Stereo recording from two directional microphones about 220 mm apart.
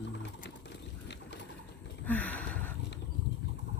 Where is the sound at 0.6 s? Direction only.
50° left (ahead or behind).